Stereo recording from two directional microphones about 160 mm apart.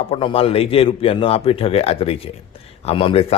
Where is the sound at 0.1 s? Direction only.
35° left (ahead or behind).